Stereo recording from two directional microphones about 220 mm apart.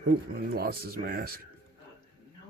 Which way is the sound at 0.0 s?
45° right (ahead or behind).